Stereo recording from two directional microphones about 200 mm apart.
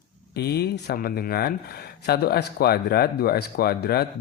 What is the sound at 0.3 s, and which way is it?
Speech, 55° left (ahead or behind).